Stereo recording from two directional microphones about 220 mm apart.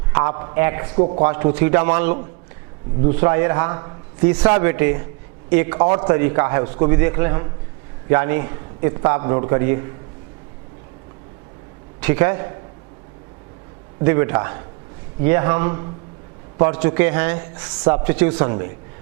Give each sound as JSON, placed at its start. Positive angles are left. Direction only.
{"t": 0.1, "sound": "a woman's voice", "side_deg": -15}
{"t": 11.9, "sound": "a man's voice", "side_deg": -10}
{"t": 14.0, "sound": "a woman's voice", "side_deg": -15}